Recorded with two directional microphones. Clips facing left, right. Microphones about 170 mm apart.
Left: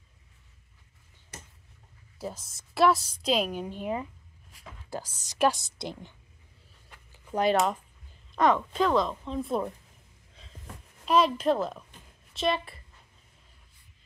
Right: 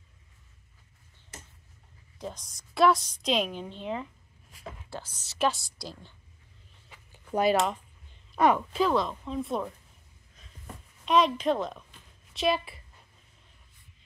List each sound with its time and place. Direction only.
2.1 s a woman's voice: 5° left (ahead or behind)
7.1 s a sound: 5° right (ahead or behind)
8.4 s speech: 10° right (ahead or behind)
11.1 s speech: centre (ahead or behind)